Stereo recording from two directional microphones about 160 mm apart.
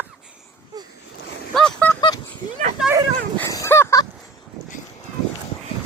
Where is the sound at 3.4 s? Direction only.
20° left (ahead or behind).